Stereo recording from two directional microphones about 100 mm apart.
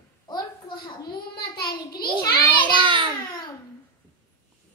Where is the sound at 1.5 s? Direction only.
40° left (ahead or behind).